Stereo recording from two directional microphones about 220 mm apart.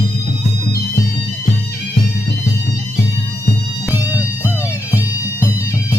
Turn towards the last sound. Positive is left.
turn(degrees=10)  # may be behind; listen again after turning